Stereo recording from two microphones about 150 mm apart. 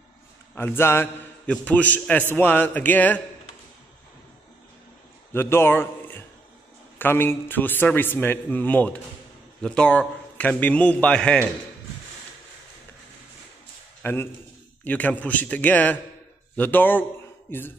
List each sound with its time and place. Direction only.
0.6 s mantra: 15° left (ahead or behind)
1.5 s a man's voice: 10° left (ahead or behind)
5.3 s a man's voice: 15° left (ahead or behind)
14.0 s a man's voice: 15° left (ahead or behind)